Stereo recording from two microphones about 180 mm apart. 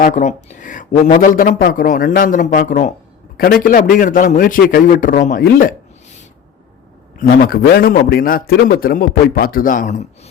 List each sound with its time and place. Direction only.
0.0 s a man's voice: 40° left (ahead or behind)
7.2 s a man's voice: 55° left (ahead or behind)